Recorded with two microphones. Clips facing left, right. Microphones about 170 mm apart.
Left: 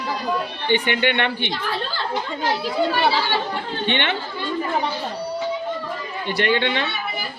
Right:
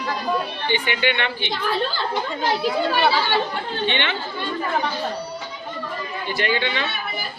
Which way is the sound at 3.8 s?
55° left (ahead or behind).